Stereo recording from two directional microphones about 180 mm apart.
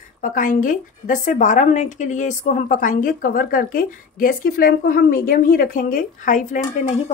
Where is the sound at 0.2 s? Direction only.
50° left (ahead or behind).